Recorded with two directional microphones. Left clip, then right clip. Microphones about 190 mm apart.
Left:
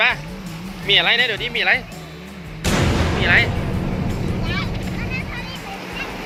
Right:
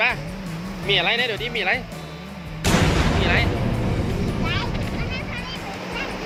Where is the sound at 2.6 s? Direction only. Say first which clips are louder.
Even; centre (ahead or behind).